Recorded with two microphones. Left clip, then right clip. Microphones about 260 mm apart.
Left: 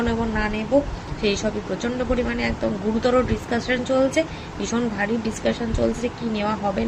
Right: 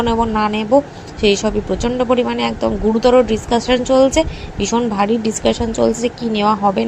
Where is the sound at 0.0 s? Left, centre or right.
Right.